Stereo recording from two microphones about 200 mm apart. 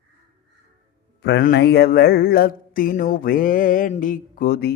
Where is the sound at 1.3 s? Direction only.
55° left (ahead or behind).